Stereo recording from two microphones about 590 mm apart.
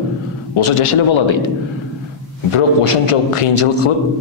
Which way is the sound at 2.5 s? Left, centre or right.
Left.